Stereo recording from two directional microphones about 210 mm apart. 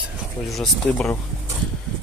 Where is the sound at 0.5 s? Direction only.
5° left (ahead or behind).